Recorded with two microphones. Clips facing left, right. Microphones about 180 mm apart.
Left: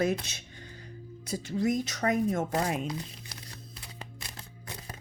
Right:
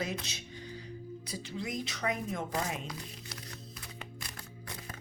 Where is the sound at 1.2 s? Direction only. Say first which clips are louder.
Left 12 dB; 45° left (ahead or behind).